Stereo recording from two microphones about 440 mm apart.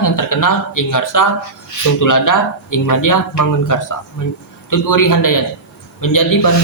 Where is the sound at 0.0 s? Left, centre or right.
Left.